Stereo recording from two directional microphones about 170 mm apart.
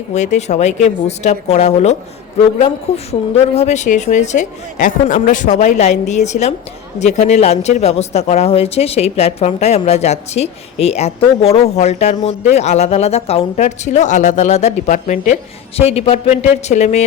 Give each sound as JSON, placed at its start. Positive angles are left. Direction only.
{"t": 0.1, "sound": "a man's voice", "side_deg": 40}